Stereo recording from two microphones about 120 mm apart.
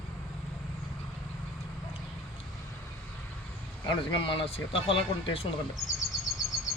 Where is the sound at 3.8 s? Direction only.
45° left (ahead or behind).